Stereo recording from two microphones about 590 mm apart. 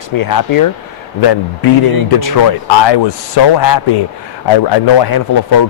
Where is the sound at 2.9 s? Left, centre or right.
Left.